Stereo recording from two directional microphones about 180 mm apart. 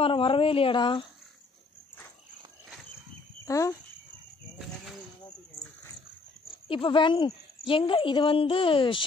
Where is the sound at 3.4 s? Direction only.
15° left (ahead or behind).